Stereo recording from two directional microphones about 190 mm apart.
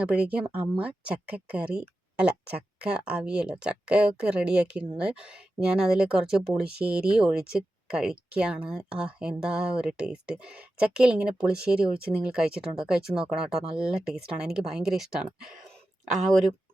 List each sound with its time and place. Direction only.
0.0 s speech: 5° right (ahead or behind)